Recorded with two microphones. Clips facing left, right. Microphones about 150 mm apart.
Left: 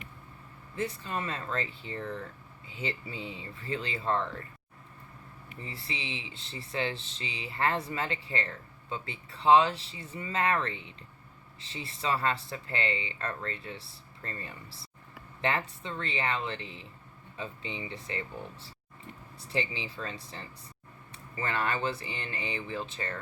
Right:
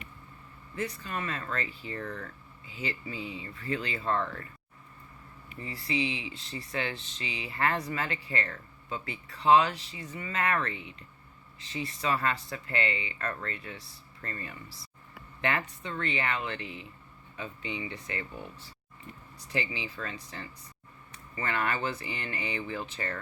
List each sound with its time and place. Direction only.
0.8 s speech: 25° left (ahead or behind)
5.5 s speech: 25° left (ahead or behind)
19.5 s speech: 25° left (ahead or behind)